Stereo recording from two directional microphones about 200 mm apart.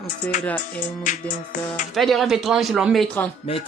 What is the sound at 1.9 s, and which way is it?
Music, centre (ahead or behind).